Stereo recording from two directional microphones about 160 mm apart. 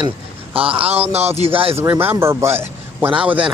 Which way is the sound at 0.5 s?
35° right (ahead or behind).